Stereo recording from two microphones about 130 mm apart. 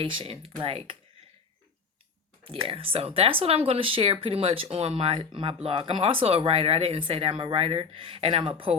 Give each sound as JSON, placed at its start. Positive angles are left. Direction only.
{"t": 0.0, "sound": "speech", "side_deg": -40}
{"t": 2.4, "sound": "speech", "side_deg": -45}